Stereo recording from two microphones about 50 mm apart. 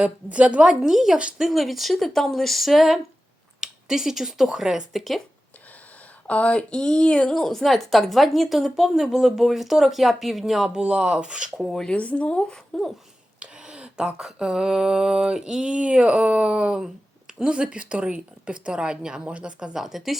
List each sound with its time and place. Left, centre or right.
0.0 s a woman's voice: right
0.7 s a sound: centre
1.4 s a woman's voice: centre
6.2 s a woman's voice: left; by 10.8 s centre
10.8 s a woman's voice: right
11.9 s speech: left
12.7 s a woman's voice: centre
13.4 s a sound: right
17.4 s a woman's voice: right
19.7 s a woman's voice: centre